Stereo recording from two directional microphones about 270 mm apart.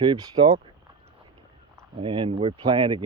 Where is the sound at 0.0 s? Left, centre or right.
Centre.